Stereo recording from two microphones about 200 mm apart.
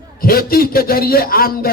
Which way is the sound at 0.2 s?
50° left (ahead or behind).